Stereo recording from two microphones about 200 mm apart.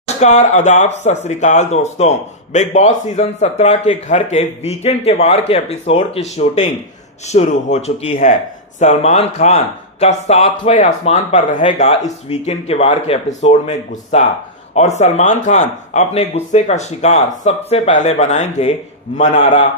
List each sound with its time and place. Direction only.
0.2 s speech: 35° left (ahead or behind)